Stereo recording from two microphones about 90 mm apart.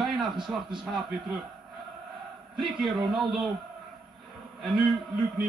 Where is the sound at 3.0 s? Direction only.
5° right (ahead or behind).